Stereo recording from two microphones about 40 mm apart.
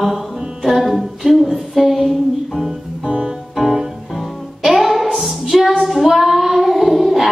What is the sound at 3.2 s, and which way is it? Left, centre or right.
Music, centre.